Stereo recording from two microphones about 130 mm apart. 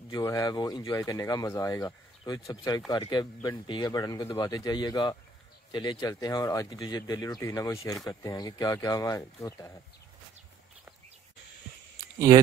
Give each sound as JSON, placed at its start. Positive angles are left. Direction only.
{"t": 0.1, "sound": "speech", "side_deg": 25}